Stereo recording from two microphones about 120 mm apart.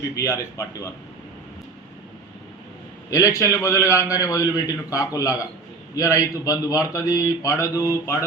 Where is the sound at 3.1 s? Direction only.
25° left (ahead or behind).